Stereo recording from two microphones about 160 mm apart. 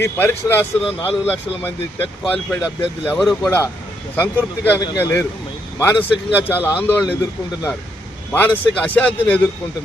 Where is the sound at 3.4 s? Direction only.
10° left (ahead or behind).